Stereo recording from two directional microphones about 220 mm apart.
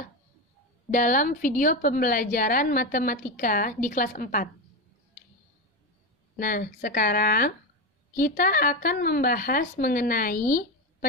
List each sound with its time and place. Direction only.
0.9 s a woman's voice: 35° left (ahead or behind)
6.3 s a woman's voice: 40° left (ahead or behind)